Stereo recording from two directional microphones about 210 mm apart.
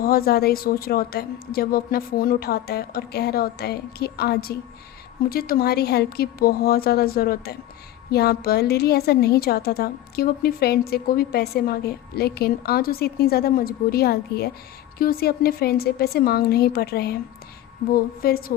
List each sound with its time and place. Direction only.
0.0 s a woman's voice: 45° left (ahead or behind)